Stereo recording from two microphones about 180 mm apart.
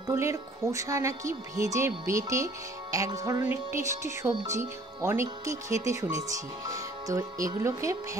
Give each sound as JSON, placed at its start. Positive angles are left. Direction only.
{"t": 0.1, "sound": "speech", "side_deg": -15}